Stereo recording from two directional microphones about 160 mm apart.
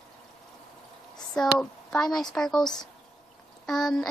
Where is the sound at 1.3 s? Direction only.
5° left (ahead or behind).